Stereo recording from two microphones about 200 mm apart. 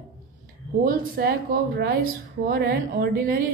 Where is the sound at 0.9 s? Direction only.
50° right (ahead or behind).